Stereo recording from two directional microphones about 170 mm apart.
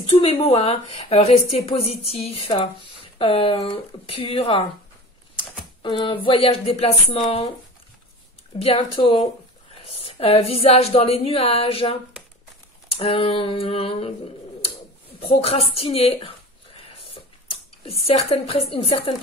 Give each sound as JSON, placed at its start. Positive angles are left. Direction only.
{"t": 0.1, "sound": "speech", "side_deg": 35}
{"t": 5.8, "sound": "speech", "side_deg": 30}
{"t": 8.5, "sound": "speech", "side_deg": 35}
{"t": 15.1, "sound": "a sound", "side_deg": 35}
{"t": 18.0, "sound": "speech", "side_deg": 35}